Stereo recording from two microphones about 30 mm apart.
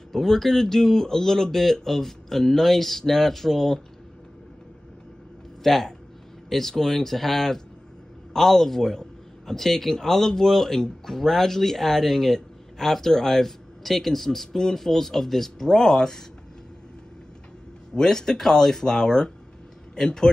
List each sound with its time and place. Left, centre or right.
0.1 s speech: centre
5.6 s a man's voice: centre
15.6 s speech: centre
17.9 s speech: centre